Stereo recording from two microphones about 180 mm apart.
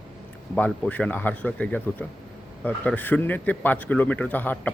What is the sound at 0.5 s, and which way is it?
A man's voice, 10° left (ahead or behind).